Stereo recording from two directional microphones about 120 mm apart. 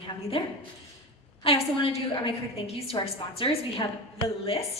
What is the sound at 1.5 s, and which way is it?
A woman's voice, 50° left (ahead or behind).